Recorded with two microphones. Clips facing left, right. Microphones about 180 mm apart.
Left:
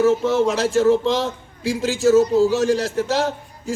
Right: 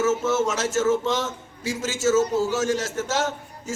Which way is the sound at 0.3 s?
35° left (ahead or behind).